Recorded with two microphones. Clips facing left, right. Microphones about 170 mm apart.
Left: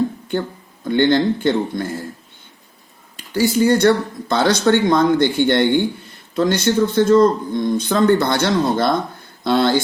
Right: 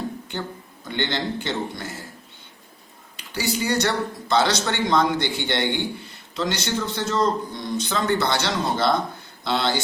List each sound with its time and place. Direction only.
0.9 s speech: 50° left (ahead or behind)
3.2 s speech: 50° left (ahead or behind)